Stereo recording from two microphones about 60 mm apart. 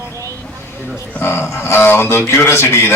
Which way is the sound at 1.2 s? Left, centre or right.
Left.